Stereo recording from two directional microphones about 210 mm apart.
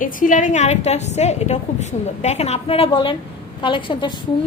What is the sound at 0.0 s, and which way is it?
A woman's voice, 40° left (ahead or behind).